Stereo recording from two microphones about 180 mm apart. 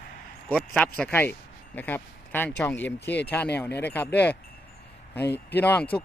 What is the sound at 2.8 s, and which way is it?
Speech, 75° left (ahead or behind).